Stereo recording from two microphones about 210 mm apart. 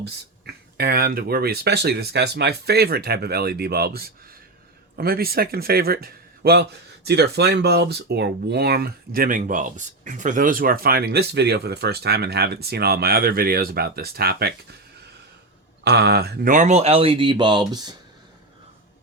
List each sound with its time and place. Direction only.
0.4 s a man's voice: 50° right (ahead or behind)
15.8 s speech: 50° right (ahead or behind); by 17.9 s 20° right (ahead or behind)